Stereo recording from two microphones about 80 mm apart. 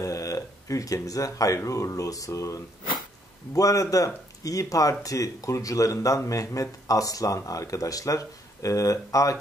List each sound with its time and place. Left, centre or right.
0.0 s speech: left